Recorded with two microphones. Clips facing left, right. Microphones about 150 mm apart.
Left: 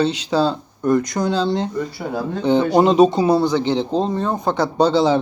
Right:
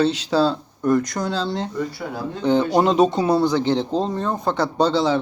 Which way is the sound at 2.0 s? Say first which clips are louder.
Left 5 dB; 30° left (ahead or behind).